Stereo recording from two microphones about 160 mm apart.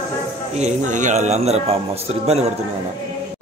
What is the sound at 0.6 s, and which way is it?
A man's voice, 50° right (ahead or behind).